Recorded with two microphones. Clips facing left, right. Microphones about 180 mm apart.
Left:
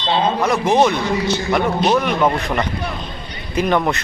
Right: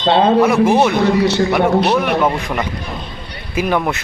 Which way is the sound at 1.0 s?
65° right (ahead or behind).